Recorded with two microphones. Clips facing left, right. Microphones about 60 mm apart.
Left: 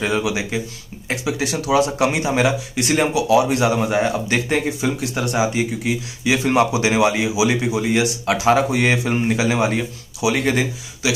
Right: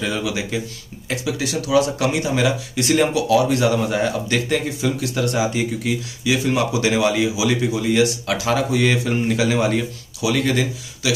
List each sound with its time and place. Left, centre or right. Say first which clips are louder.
0.2 s speech: left 2 dB; centre
6.2 s speech: left 3 dB; left